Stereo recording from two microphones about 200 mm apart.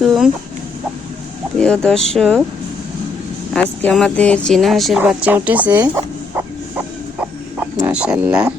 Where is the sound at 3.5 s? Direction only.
5° left (ahead or behind).